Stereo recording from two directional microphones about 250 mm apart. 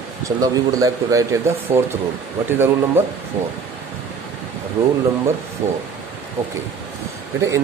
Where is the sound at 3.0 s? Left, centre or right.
Centre.